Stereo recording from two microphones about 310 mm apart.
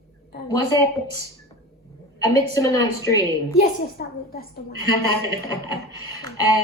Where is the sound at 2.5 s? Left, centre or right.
Centre.